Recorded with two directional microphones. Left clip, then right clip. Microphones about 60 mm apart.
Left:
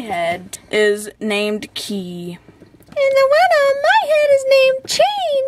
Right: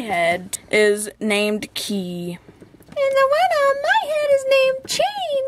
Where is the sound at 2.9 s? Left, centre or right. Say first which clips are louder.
Left 4 dB; left.